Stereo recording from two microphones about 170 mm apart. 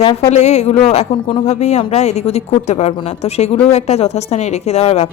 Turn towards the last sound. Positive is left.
turn(degrees=35)  # may be behind; listen again after turning